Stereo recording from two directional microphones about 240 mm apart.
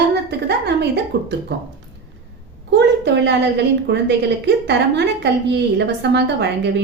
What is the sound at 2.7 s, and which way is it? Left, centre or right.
A woman's voice, right.